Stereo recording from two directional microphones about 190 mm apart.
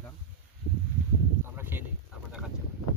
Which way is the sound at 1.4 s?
10° right (ahead or behind).